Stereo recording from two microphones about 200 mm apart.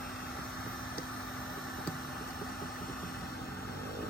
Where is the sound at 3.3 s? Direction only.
50° left (ahead or behind).